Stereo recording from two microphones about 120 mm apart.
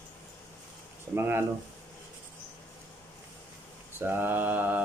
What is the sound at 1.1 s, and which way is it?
Speech, 20° right (ahead or behind).